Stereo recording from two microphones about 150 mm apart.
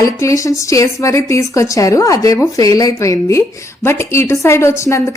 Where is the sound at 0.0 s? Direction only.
20° left (ahead or behind).